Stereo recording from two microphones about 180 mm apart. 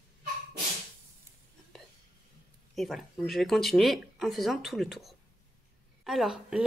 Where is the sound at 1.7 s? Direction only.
Centre (ahead or behind).